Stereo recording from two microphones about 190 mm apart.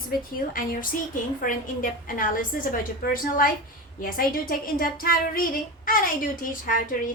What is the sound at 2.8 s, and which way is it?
A woman's voice, 50° left (ahead or behind).